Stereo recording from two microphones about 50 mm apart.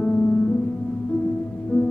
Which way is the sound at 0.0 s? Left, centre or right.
Left.